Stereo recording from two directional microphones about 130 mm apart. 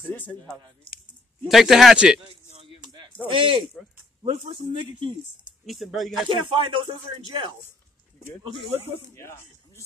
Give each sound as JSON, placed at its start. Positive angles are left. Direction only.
{"t": 0.0, "sound": "speech", "side_deg": 15}
{"t": 1.5, "sound": "speech", "side_deg": 0}
{"t": 2.5, "sound": "music", "side_deg": -45}
{"t": 3.3, "sound": "speech", "side_deg": -45}
{"t": 5.7, "sound": "speech", "side_deg": 0}
{"t": 6.2, "sound": "speech", "side_deg": -40}
{"t": 9.1, "sound": "speech", "side_deg": 20}